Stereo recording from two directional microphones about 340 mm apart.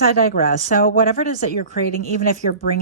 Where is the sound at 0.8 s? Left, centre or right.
Left.